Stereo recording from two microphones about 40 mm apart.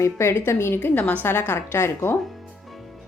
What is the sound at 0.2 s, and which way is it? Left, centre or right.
Speech, left.